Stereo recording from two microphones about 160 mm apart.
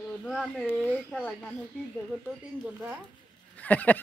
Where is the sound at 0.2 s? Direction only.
Centre (ahead or behind).